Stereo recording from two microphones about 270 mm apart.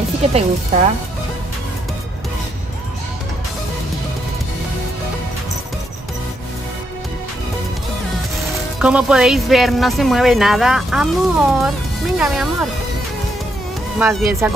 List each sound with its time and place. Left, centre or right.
0.3 s speech: right
8.7 s speech: centre
13.9 s speech: centre